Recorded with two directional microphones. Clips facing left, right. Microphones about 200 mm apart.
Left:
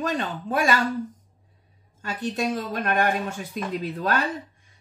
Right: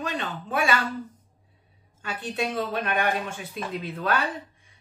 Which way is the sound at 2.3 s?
45° left (ahead or behind).